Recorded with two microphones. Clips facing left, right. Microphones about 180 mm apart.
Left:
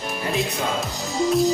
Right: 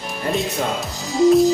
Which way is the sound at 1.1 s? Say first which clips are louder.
Right 7 dB; centre (ahead or behind).